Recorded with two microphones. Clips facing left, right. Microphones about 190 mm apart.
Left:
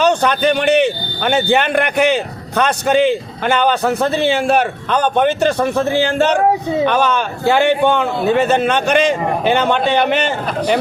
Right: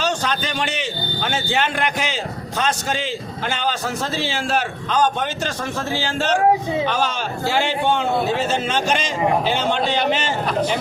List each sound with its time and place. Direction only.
0.0 s a man's voice: 60° left (ahead or behind)